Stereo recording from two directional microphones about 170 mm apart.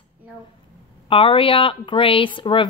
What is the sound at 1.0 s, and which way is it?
A woman's voice, 30° left (ahead or behind).